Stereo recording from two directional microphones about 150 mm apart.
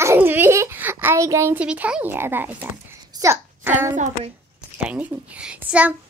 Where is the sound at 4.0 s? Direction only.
55° right (ahead or behind).